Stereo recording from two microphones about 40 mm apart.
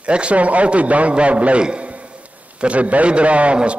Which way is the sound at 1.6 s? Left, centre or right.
Right.